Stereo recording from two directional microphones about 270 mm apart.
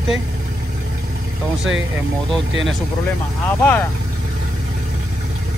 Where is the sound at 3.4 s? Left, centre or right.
Centre.